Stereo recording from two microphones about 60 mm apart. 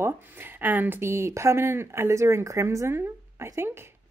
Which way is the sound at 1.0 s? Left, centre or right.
Right.